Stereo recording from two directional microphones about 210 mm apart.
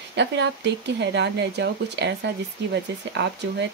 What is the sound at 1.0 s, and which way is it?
Speech, 55° right (ahead or behind).